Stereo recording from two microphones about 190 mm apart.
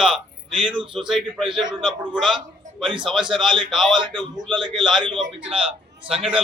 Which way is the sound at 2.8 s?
25° right (ahead or behind).